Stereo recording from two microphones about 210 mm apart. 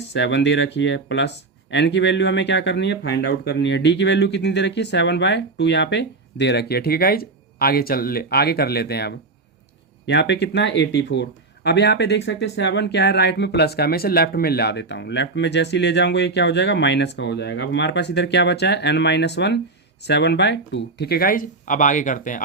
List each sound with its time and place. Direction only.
0.1 s speech: 55° left (ahead or behind); by 22.4 s 40° left (ahead or behind)